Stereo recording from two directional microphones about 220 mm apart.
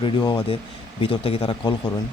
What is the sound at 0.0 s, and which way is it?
Speech, 20° left (ahead or behind).